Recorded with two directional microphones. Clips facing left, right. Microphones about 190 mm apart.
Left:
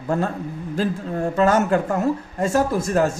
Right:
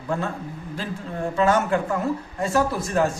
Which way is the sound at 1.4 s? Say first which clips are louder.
Left 2 dB; 40° left (ahead or behind).